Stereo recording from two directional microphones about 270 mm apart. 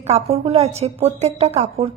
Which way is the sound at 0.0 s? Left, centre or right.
Right.